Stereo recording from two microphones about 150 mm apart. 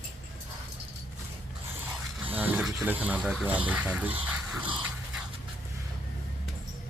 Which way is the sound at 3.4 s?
10° right (ahead or behind).